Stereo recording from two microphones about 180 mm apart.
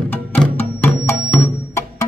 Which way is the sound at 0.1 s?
10° left (ahead or behind).